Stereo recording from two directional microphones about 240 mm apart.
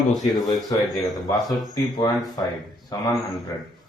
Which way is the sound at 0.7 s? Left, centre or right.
Centre.